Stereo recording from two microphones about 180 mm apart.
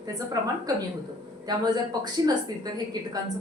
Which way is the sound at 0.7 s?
20° right (ahead or behind).